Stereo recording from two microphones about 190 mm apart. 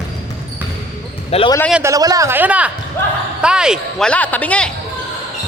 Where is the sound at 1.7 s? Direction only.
15° right (ahead or behind); by 4.7 s 5° left (ahead or behind).